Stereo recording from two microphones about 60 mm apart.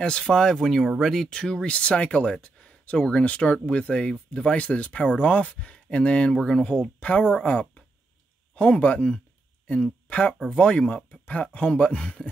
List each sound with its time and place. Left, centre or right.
0.0 s speech: centre
1.3 s speech: centre
6.3 s speech: centre
6.6 s speech: centre